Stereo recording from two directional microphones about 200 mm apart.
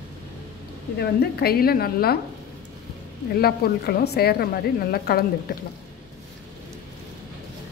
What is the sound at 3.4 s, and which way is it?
A woman's voice, 50° left (ahead or behind).